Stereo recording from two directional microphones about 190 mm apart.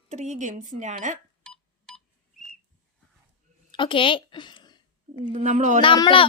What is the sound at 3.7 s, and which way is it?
A woman's voice, 25° left (ahead or behind).